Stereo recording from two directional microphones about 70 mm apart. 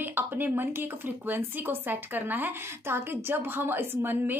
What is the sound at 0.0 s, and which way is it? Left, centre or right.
A woman's voice, right.